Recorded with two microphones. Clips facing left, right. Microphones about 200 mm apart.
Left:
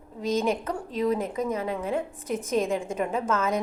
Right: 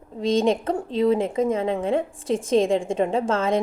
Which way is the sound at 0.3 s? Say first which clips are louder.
Right 5 dB; 30° right (ahead or behind).